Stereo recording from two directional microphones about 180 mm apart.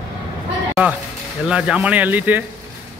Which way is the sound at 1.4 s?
5° right (ahead or behind).